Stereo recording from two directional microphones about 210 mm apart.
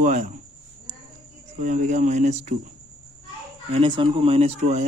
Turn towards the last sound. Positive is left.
turn(degrees=-30)  # may be behind; listen again after turning